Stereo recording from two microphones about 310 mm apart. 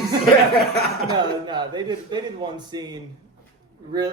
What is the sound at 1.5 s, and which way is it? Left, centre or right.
A man's voice, centre.